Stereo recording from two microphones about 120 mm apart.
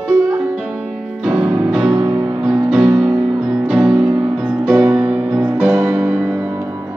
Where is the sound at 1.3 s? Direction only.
15° right (ahead or behind).